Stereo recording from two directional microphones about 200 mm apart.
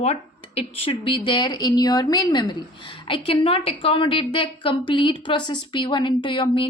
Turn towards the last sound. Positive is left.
turn(degrees=25)  # may be behind; listen again after turning